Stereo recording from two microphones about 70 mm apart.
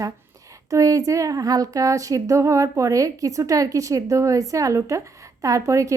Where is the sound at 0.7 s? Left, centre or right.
Right.